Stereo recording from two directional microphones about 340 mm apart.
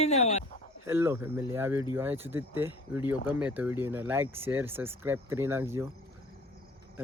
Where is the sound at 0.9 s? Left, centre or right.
Centre.